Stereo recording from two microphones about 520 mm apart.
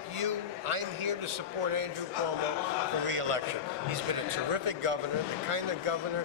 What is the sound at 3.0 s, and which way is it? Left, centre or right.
Speech, right.